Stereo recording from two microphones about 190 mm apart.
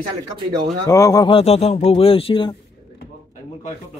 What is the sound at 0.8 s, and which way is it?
Speech, 15° left (ahead or behind).